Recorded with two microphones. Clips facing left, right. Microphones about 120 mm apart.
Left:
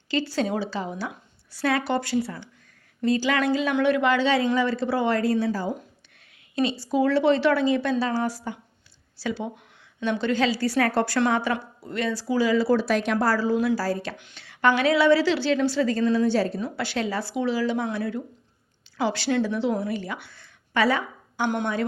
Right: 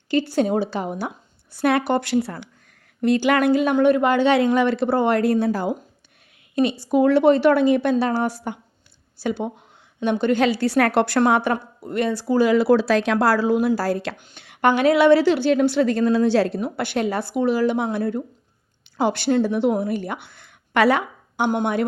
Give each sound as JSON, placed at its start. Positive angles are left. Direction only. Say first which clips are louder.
{"t": 0.1, "sound": "a woman's voice", "louder": "right 5 dB", "side_deg": -55}
{"t": 3.8, "sound": "a woman's voice", "louder": "right 4 dB", "side_deg": -45}
{"t": 11.5, "sound": "speech", "louder": "right 5 dB", "side_deg": -50}
{"t": 14.2, "sound": "a woman's voice", "louder": "right 3 dB", "side_deg": -50}
{"t": 16.7, "sound": "a woman's voice", "louder": "right 4 dB", "side_deg": -55}
{"t": 20.7, "sound": "a woman's voice", "louder": "right 5 dB", "side_deg": -65}